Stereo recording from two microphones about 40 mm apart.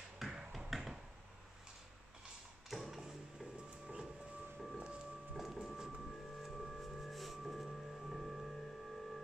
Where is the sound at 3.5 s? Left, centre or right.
Right.